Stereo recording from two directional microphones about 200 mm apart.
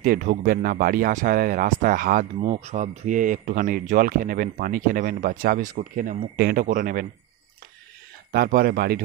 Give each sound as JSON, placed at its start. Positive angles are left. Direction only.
{"t": 0.0, "sound": "speech", "side_deg": -45}
{"t": 8.3, "sound": "speech", "side_deg": -45}